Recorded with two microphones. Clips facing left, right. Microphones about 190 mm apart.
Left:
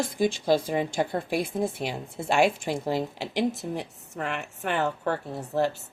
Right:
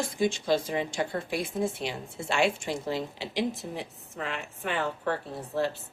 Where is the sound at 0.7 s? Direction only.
45° left (ahead or behind).